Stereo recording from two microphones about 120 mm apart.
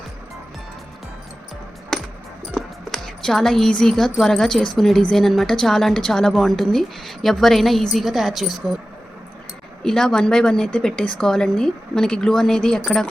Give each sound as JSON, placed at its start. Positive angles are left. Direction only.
{"t": 2.6, "sound": "a woman's voice", "side_deg": 5}
{"t": 9.8, "sound": "a woman's voice", "side_deg": 5}